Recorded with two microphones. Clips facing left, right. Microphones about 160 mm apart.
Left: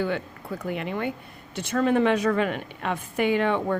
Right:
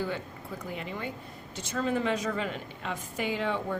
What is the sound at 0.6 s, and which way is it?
A woman's voice, 65° left (ahead or behind).